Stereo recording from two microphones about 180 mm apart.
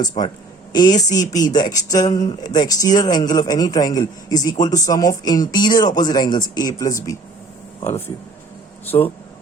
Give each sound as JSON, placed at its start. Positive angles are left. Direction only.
{"t": 0.7, "sound": "speech", "side_deg": 25}